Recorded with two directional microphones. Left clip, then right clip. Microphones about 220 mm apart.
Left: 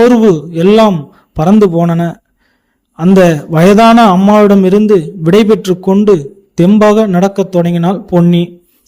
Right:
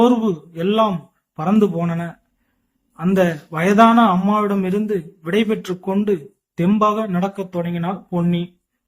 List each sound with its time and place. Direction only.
0.0 s a man's voice: 45° left (ahead or behind)